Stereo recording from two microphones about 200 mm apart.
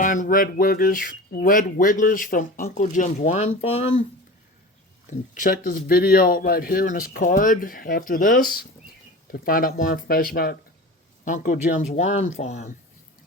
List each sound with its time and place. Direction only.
0.0 s speech: 40° left (ahead or behind)
5.4 s speech: 45° left (ahead or behind)